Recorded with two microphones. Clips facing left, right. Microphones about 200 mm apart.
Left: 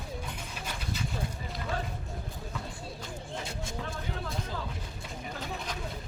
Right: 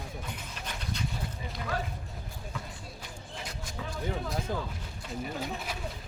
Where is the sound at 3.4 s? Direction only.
25° left (ahead or behind).